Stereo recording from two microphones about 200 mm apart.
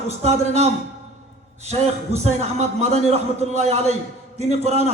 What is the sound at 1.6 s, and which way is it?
A man's voice, 30° right (ahead or behind).